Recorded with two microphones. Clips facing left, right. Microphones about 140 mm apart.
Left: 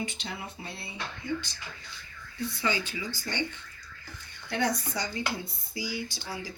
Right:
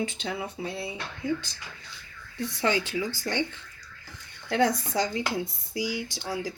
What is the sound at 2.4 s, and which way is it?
Speech, 85° right.